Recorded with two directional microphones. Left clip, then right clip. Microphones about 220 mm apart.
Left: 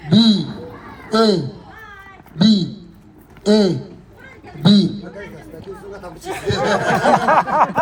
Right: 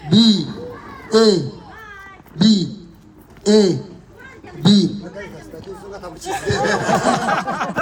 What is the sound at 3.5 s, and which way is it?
Speech, 15° left (ahead or behind).